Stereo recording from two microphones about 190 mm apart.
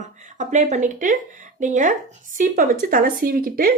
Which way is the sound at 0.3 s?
40° right (ahead or behind).